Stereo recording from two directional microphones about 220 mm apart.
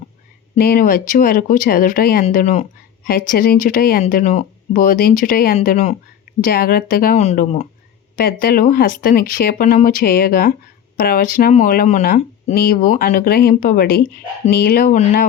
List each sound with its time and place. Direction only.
0.6 s speech: 40° left (ahead or behind)
6.5 s speech: 45° left (ahead or behind)
8.1 s speech: 45° left (ahead or behind)